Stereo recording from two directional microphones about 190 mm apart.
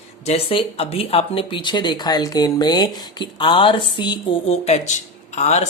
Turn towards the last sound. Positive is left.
turn(degrees=35)  # may be behind; listen again after turning